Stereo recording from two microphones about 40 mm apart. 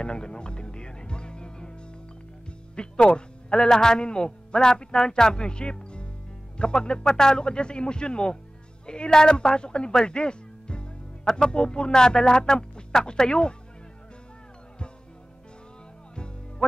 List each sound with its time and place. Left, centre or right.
0.0 s music: left
2.7 s a man's voice: left